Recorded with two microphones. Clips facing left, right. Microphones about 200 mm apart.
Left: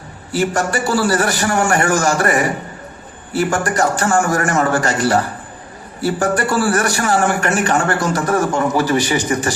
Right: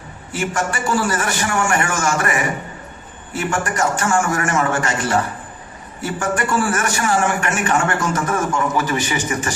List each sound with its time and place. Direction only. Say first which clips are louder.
0.3 s a man's voice: left 5 dB; 35° left (ahead or behind)